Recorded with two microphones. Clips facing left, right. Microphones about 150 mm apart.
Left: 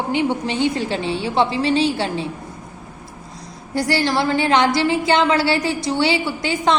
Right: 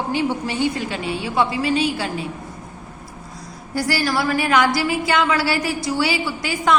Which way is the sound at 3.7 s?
25° left (ahead or behind).